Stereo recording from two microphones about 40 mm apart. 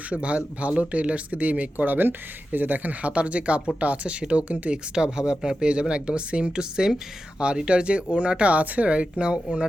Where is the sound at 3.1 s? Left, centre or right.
Right.